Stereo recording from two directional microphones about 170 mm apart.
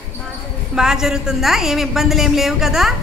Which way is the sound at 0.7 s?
5° right (ahead or behind).